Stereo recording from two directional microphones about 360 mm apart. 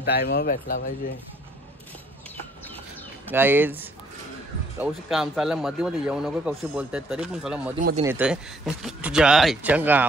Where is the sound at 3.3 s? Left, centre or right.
Centre.